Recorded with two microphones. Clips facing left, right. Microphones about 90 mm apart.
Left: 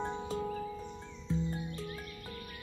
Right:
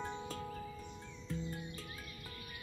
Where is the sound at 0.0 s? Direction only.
30° left (ahead or behind).